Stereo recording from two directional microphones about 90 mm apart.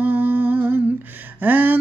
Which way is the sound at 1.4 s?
20° right (ahead or behind).